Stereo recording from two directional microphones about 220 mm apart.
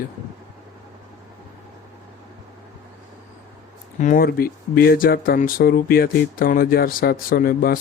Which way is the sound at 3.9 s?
35° left (ahead or behind).